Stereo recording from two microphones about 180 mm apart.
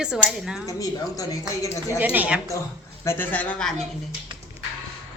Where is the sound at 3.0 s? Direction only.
10° left (ahead or behind).